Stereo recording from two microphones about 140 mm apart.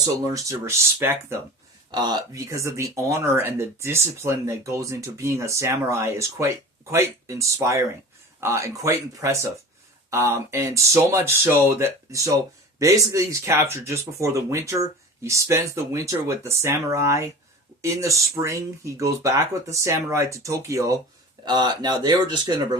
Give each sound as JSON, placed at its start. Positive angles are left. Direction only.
{"t": 0.3, "sound": "speech", "side_deg": -20}
{"t": 1.9, "sound": "speech", "side_deg": -30}